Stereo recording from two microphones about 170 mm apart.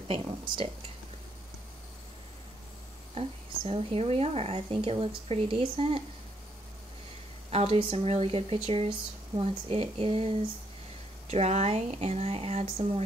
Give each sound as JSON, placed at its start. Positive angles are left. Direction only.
{"t": 0.1, "sound": "speech", "side_deg": -30}
{"t": 3.2, "sound": "speech", "side_deg": -35}
{"t": 7.5, "sound": "speech", "side_deg": -35}